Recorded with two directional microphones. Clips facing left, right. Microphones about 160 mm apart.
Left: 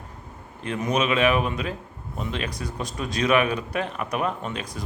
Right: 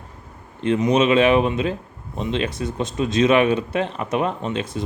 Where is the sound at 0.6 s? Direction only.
25° right (ahead or behind).